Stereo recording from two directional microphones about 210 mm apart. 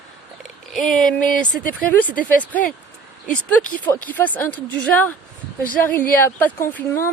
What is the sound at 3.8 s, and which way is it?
Speech, 10° left (ahead or behind).